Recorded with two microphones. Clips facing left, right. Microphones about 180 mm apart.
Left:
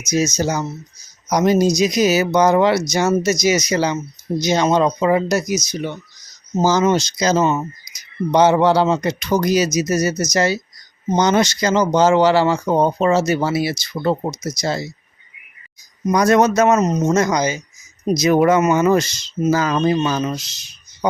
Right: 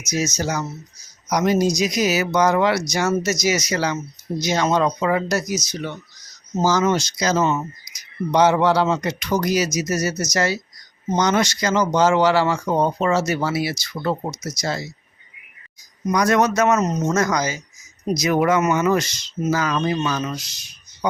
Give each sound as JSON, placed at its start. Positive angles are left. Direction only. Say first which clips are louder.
{"t": 0.3, "sound": "speech", "louder": "left 4 dB", "side_deg": 20}
{"t": 16.1, "sound": "speech", "louder": "left 4 dB", "side_deg": 30}